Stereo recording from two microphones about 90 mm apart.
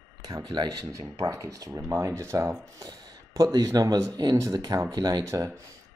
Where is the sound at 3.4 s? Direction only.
40° right (ahead or behind).